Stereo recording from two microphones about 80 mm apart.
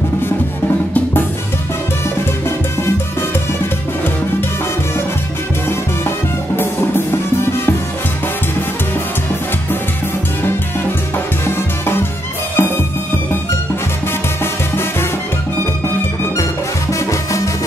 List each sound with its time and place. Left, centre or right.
5.7 s music: left
11.4 s music: left
14.4 s music: left